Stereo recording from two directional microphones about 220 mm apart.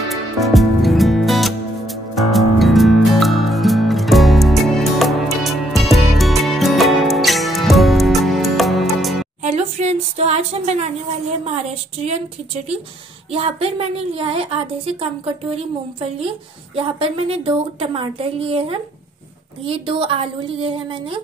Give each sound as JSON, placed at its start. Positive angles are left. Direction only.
{"t": 0.1, "sound": "music", "side_deg": 0}
{"t": 9.4, "sound": "a sound", "side_deg": -30}
{"t": 11.4, "sound": "a woman's voice", "side_deg": -30}
{"t": 16.7, "sound": "a woman's voice", "side_deg": -25}